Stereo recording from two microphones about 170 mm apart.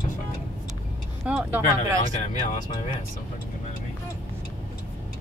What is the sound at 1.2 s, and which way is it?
Speech, 10° right (ahead or behind).